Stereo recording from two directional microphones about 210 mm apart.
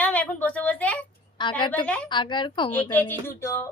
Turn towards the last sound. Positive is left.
turn(degrees=10)  # may be behind; listen again after turning